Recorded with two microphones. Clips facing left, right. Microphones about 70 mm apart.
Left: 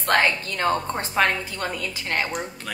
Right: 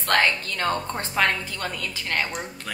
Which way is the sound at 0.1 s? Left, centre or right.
Centre.